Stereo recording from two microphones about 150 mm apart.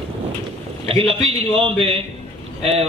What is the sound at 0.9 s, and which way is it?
A man's voice, 40° right (ahead or behind).